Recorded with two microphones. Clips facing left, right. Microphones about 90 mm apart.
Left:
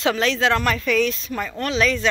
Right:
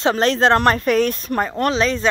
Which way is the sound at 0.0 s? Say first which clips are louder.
Right 4 dB; 40° right (ahead or behind).